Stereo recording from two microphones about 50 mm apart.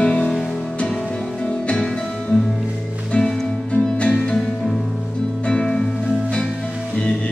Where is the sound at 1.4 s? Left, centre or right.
Left.